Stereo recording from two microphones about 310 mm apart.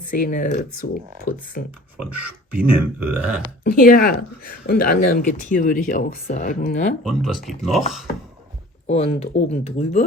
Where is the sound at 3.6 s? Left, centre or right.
Left.